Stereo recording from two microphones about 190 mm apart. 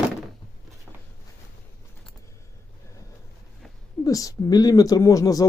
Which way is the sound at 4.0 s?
20° left (ahead or behind).